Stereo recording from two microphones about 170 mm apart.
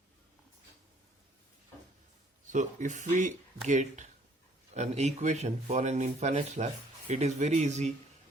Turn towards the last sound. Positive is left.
turn(degrees=-40)  # may be behind; listen again after turning